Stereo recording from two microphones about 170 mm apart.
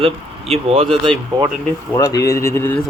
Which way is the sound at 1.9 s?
20° left (ahead or behind).